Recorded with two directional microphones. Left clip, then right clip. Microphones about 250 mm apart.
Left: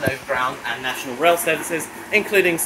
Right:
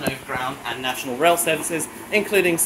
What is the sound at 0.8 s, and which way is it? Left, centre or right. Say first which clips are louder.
Speech: even; right.